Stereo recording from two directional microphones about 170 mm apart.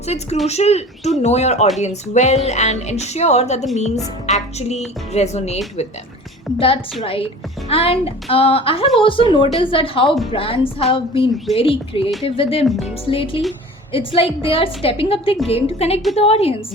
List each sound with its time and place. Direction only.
0.4 s speech: 40° left (ahead or behind)
7.0 s speech: 35° left (ahead or behind)
12.6 s a woman's voice: centre (ahead or behind)
13.1 s speech: 30° left (ahead or behind)